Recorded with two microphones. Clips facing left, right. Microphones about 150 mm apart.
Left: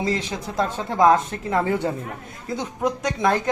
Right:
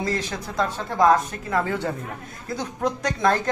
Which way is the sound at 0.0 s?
20° left (ahead or behind).